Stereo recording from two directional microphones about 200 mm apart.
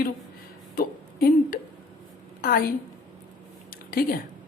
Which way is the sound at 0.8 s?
50° left (ahead or behind).